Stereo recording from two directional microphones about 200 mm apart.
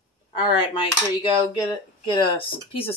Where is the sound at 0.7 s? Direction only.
25° left (ahead or behind).